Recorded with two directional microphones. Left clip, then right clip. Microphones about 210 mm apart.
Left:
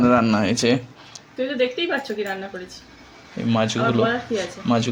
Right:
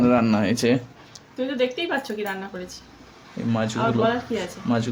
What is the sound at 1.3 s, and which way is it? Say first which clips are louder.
Speech: left 2 dB; 25° right (ahead or behind).